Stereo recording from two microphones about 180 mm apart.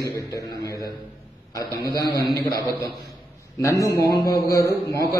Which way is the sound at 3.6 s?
15° left (ahead or behind).